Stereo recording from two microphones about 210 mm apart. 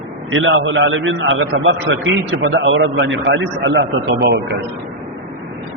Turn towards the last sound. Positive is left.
turn(degrees=-55)  # may be behind; listen again after turning